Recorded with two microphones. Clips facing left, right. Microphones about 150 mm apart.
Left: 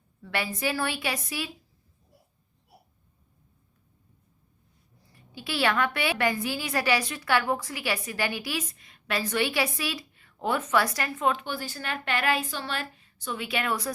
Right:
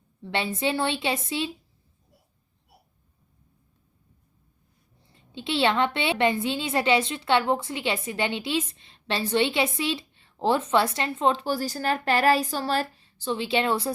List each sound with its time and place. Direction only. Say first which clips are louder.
0.2 s a woman's voice: right 3 dB; 25° right (ahead or behind)
5.1 s a woman's voice: right 4 dB; 25° right (ahead or behind)